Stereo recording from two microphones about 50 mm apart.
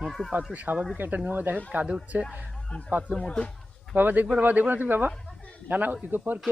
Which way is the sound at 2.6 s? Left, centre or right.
Left.